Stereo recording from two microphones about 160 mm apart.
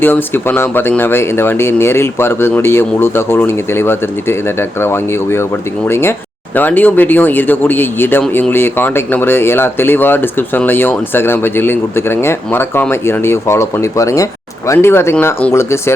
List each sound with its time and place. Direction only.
0.0 s speech: 15° left (ahead or behind)